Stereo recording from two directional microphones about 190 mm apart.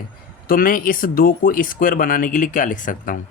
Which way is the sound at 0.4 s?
50° left (ahead or behind).